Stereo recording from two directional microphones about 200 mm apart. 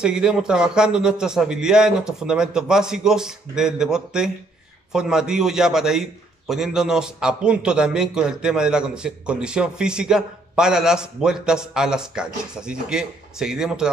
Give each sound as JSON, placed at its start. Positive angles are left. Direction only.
{"t": 0.0, "sound": "a man's voice", "side_deg": -5}